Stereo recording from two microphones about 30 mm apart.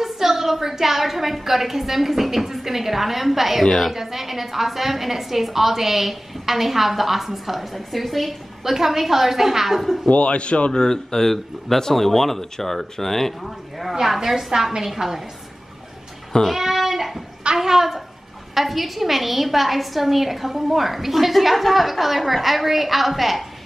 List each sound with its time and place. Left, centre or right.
0.0 s a woman's voice: centre
10.0 s speech: left
10.7 s speech: left
14.0 s a woman's voice: centre
16.5 s a woman's voice: centre